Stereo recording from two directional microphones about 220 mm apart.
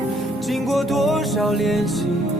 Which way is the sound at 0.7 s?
Centre (ahead or behind).